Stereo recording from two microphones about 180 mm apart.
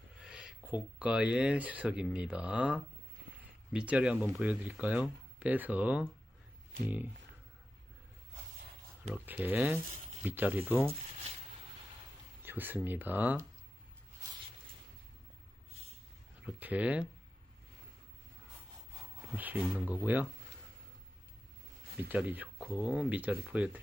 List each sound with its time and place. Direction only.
0.2 s speech: 5° right (ahead or behind)
9.1 s speech: 10° right (ahead or behind)
12.4 s speech: 10° right (ahead or behind)
16.4 s speech: 10° right (ahead or behind)
19.4 s speech: 10° right (ahead or behind)
21.9 s speech: 10° right (ahead or behind)